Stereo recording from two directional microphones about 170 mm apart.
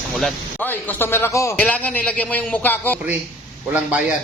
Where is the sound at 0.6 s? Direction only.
10° left (ahead or behind).